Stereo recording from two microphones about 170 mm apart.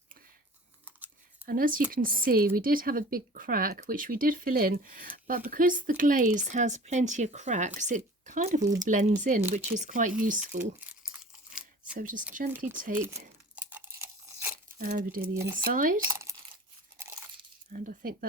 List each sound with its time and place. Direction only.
0.9 s a sound: 10° right (ahead or behind)
1.5 s speech: 55° right (ahead or behind)
10.6 s crumpling: 10° right (ahead or behind)
11.9 s speech: 50° right (ahead or behind)
12.5 s speech: 10° right (ahead or behind)
13.6 s a sound: 10° right (ahead or behind)
14.8 s speech: 55° right (ahead or behind)
16.0 s speech: 15° right (ahead or behind)
17.0 s crunch: 15° right (ahead or behind)
17.7 s speech: 50° right (ahead or behind)